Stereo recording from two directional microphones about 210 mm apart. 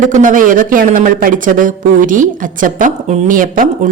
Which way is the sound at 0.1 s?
40° right (ahead or behind).